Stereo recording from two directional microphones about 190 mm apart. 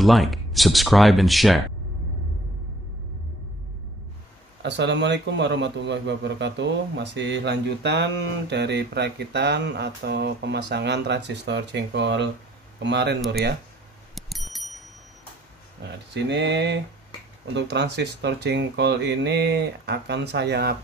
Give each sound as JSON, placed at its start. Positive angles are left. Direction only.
{"t": 0.0, "sound": "speech", "side_deg": 0}
{"t": 4.6, "sound": "a man's voice", "side_deg": -70}
{"t": 14.1, "sound": "bicycle bell", "side_deg": 0}
{"t": 16.1, "sound": "a man's voice", "side_deg": -65}